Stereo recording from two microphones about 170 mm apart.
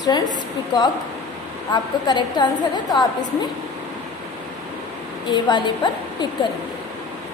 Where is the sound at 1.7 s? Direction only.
25° left (ahead or behind).